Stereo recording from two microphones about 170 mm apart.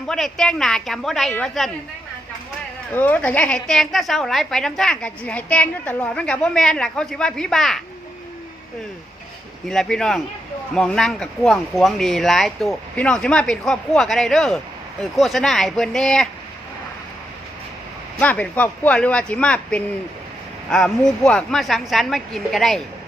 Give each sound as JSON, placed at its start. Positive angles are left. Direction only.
{"t": 0.1, "sound": "a woman's voice", "side_deg": 5}
{"t": 2.9, "sound": "a woman's voice", "side_deg": 10}
{"t": 9.6, "sound": "a woman's voice", "side_deg": 5}
{"t": 18.2, "sound": "a woman's voice", "side_deg": 10}